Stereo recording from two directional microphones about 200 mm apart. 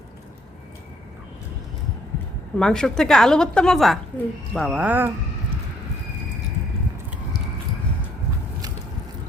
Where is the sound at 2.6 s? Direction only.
5° left (ahead or behind).